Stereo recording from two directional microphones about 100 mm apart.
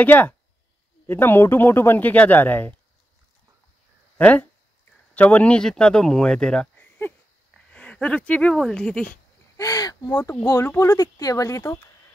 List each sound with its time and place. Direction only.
0.0 s speech: 20° left (ahead or behind)
4.2 s a man's voice: 15° left (ahead or behind)
9.6 s speech: 40° left (ahead or behind)